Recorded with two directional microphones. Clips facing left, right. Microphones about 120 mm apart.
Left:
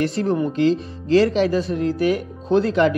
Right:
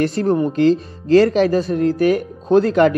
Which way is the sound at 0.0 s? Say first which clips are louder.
Right 3 dB; 40° right (ahead or behind).